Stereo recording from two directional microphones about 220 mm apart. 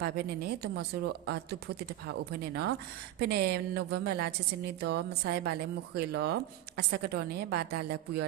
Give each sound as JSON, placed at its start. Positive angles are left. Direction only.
{"t": 0.0, "sound": "a woman's voice", "side_deg": -45}